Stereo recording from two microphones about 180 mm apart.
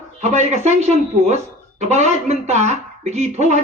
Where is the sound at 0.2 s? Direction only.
40° right (ahead or behind).